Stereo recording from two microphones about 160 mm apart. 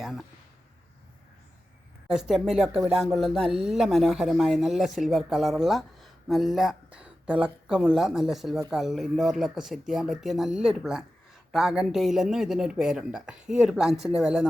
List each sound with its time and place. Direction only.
0.0 s speech: centre (ahead or behind)
2.0 s speech: 5° right (ahead or behind)